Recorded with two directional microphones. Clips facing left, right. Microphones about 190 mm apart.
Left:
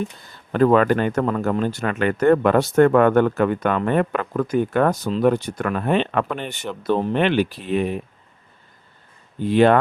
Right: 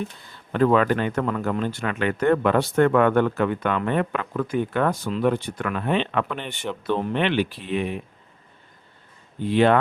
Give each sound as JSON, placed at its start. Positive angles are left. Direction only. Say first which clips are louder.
{"t": 0.5, "sound": "speech", "louder": "left 3 dB", "side_deg": 45}
{"t": 9.5, "sound": "speech", "louder": "left 3 dB", "side_deg": 45}